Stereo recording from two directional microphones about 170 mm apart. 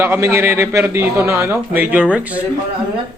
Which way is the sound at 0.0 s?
15° right (ahead or behind).